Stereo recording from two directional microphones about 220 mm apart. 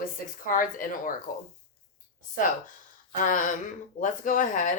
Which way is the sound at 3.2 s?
35° left (ahead or behind).